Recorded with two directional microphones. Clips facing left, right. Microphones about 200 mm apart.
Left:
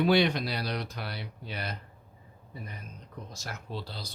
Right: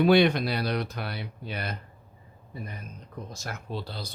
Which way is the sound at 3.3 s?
50° right (ahead or behind).